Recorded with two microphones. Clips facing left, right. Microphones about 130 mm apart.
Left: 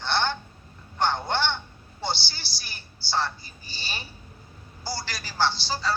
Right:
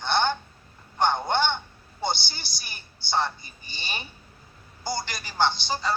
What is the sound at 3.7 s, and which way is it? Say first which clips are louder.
Speech: right 2 dB; 55° right (ahead or behind).